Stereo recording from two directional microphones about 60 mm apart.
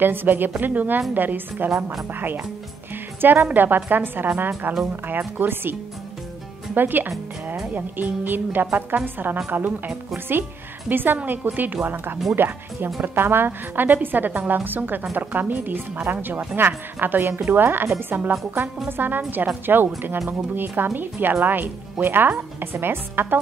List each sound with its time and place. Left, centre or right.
0.0 s a woman's voice: right